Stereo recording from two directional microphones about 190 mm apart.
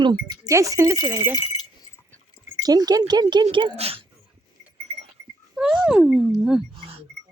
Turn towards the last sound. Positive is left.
turn(degrees=-30)  # may be behind; listen again after turning